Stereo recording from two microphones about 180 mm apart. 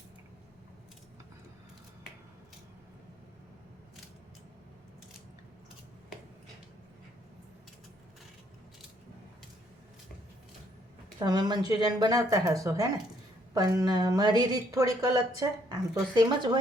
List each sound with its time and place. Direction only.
11.2 s speech: 20° right (ahead or behind)